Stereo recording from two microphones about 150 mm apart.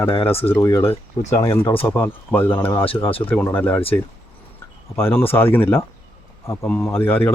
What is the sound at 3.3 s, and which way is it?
Speech, 15° left (ahead or behind).